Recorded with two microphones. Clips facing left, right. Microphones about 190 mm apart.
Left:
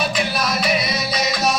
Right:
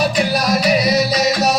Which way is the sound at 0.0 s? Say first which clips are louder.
Right 5 dB; 40° right (ahead or behind).